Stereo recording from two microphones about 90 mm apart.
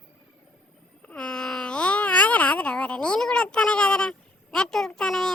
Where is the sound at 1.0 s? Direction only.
15° left (ahead or behind).